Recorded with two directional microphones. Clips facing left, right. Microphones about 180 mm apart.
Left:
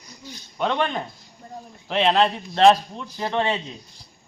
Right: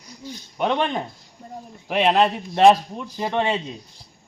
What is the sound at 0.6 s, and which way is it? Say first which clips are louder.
A man's voice: right 1 dB; 15° right (ahead or behind).